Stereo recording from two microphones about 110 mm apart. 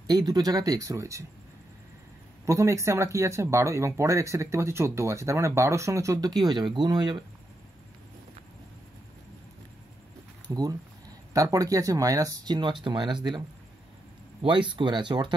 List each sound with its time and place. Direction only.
0.0 s speech: 35° right (ahead or behind)
2.4 s speech: 25° right (ahead or behind)
10.5 s speech: 35° right (ahead or behind)
14.4 s speech: 45° right (ahead or behind)